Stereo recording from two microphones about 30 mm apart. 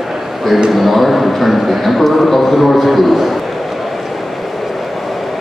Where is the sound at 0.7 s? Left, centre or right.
Centre.